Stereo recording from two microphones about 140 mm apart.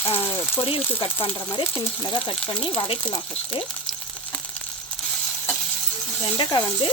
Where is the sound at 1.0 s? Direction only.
40° left (ahead or behind).